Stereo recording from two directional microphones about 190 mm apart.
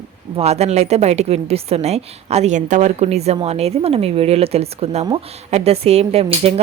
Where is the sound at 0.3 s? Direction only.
35° right (ahead or behind).